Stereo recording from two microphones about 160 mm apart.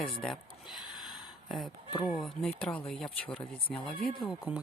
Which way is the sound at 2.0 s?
Centre (ahead or behind).